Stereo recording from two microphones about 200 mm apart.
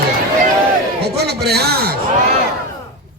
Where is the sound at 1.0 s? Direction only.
55° right (ahead or behind).